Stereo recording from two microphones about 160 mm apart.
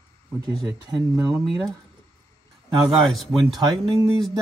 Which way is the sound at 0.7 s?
25° right (ahead or behind).